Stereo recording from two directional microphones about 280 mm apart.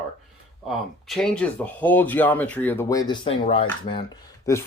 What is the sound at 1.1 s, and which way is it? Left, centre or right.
Speech, centre.